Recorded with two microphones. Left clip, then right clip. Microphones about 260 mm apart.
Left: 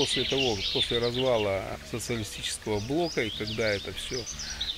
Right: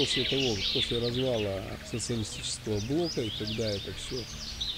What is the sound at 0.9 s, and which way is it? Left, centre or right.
Speech, left.